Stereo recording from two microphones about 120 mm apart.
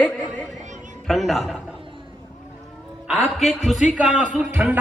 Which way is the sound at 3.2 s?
5° right (ahead or behind).